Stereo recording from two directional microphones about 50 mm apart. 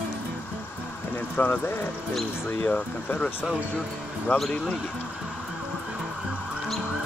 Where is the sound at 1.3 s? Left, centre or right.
Left.